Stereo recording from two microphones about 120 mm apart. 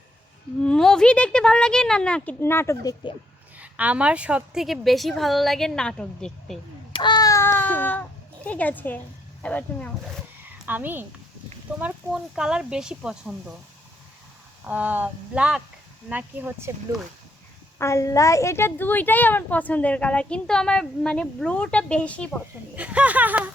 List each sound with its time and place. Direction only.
0.6 s a woman's voice: 5° left (ahead or behind)
2.4 s speech: 20° left (ahead or behind)
3.6 s a woman's voice: 10° right (ahead or behind); by 6.6 s 5° left (ahead or behind)
6.9 s child singing: 40° left (ahead or behind)
7.3 s a sound: 25° left (ahead or behind)
8.4 s a woman's voice: 15° left (ahead or behind)
10.7 s speech: 15° right (ahead or behind)
14.6 s speech: 10° right (ahead or behind)
17.7 s a woman's voice: 25° left (ahead or behind)
22.7 s speech: 10° right (ahead or behind)